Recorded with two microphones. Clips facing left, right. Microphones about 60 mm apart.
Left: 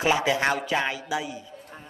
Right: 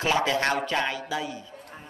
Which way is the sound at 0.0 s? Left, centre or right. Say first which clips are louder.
Left 1 dB; centre.